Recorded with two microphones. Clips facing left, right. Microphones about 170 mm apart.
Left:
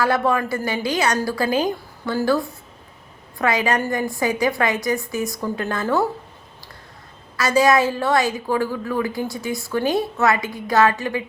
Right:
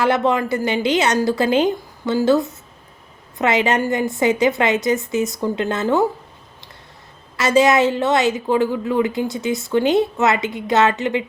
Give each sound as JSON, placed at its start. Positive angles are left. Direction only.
{"t": 0.0, "sound": "a woman's voice", "side_deg": -20}
{"t": 7.3, "sound": "a woman's voice", "side_deg": -25}